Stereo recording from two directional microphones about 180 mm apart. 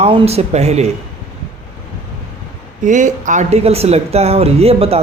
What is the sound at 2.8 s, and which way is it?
Speech, 45° right (ahead or behind).